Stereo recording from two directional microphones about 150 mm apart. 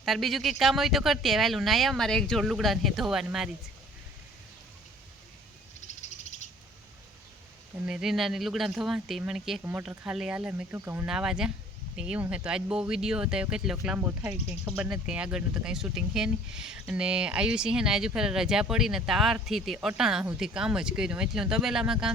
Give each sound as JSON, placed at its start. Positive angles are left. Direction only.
{"t": 0.0, "sound": "speech", "side_deg": 0}
{"t": 7.9, "sound": "speech", "side_deg": -5}
{"t": 11.1, "sound": "speech", "side_deg": -5}